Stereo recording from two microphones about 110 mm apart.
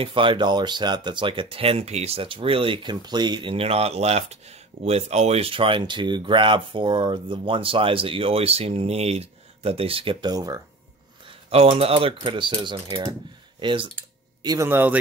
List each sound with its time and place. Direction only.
0.0 s speech: 50° right (ahead or behind)
3.5 s speech: 65° right (ahead or behind)
10.2 s speech: 35° right (ahead or behind)
11.5 s speech: 65° right (ahead or behind); by 13.8 s 50° right (ahead or behind)
14.4 s a man's voice: 35° right (ahead or behind)
14.7 s a man's voice: 20° right (ahead or behind)